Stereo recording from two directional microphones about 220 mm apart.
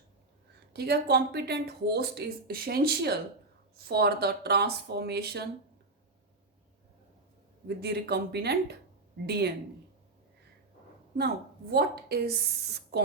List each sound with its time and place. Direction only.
0.7 s speech: 45° right (ahead or behind)
7.8 s speech: 50° right (ahead or behind)
11.7 s speech: 45° right (ahead or behind)